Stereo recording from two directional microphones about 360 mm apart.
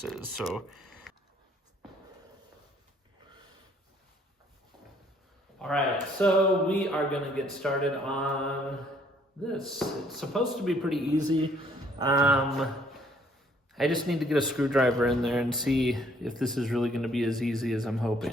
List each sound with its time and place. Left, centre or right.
0.1 s speech: centre
5.5 s speech: centre